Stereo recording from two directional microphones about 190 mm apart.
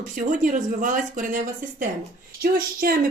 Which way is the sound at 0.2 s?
45° right (ahead or behind).